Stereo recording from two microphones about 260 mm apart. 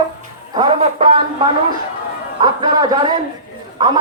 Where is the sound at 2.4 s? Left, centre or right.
Centre.